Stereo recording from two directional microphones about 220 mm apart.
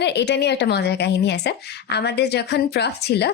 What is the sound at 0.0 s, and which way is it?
A woman's voice, 50° left (ahead or behind).